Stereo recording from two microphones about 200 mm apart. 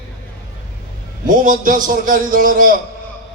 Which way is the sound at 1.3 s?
40° right (ahead or behind).